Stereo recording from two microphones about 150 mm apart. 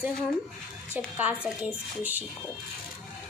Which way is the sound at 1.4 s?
10° right (ahead or behind).